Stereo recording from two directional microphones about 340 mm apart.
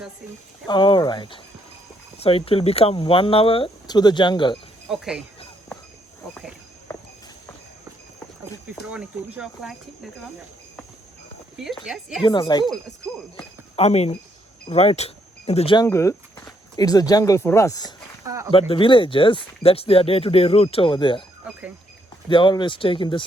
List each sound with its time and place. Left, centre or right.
0.7 s speech: centre
4.9 s speech: centre
6.3 s cricket: centre
8.8 s speech: centre
11.6 s speech: centre
12.2 s speech: centre
18.3 s speech: centre
18.7 s speech: centre
22.3 s speech: centre